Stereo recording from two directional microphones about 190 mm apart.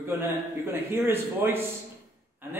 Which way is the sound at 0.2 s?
10° right (ahead or behind).